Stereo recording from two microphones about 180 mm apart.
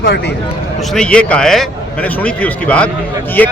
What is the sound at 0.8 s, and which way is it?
Speech, centre (ahead or behind).